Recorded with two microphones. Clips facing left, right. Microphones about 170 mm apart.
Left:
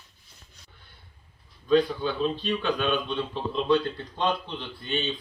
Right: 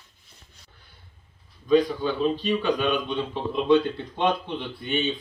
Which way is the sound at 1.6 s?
5° right (ahead or behind).